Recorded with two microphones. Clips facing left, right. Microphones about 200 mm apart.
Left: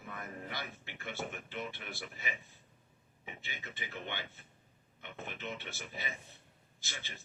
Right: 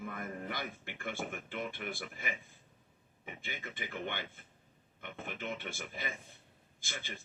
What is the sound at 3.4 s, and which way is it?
A man's voice, 50° right (ahead or behind).